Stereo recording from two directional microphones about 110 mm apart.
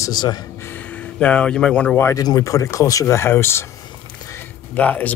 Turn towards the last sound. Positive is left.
turn(degrees=15)  # may be behind; listen again after turning